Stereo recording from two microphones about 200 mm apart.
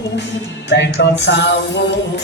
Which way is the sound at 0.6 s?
60° left (ahead or behind).